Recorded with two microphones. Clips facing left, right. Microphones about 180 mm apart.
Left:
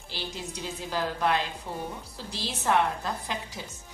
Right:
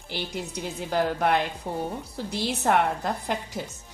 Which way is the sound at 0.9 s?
55° right (ahead or behind).